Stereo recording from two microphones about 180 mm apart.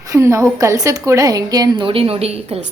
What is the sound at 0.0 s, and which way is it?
A woman's voice, 15° right (ahead or behind).